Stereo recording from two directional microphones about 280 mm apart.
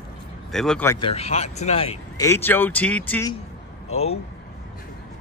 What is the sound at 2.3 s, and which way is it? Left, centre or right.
Speech, centre.